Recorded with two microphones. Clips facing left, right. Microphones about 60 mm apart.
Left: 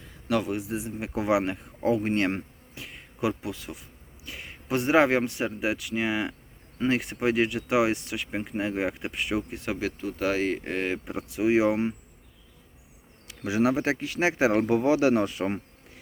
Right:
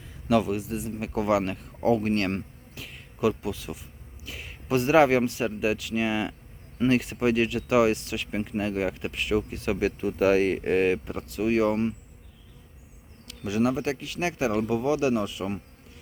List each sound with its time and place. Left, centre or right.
0.3 s speech: centre
9.8 s speech: centre
11.0 s speech: centre
13.2 s a man's voice: left